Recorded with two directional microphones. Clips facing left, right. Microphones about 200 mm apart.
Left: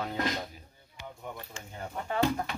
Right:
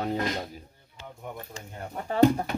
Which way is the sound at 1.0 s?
15° left (ahead or behind).